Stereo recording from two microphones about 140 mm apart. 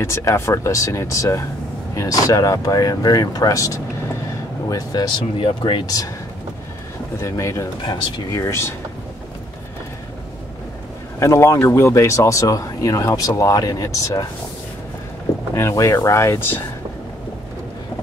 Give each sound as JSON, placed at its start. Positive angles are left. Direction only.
{"t": 0.0, "sound": "speech", "side_deg": 20}
{"t": 7.2, "sound": "speech", "side_deg": 20}
{"t": 11.1, "sound": "speech", "side_deg": 20}
{"t": 15.5, "sound": "speech", "side_deg": 20}